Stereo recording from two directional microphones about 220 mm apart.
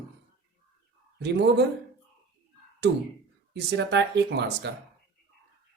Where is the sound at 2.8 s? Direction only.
50° right (ahead or behind).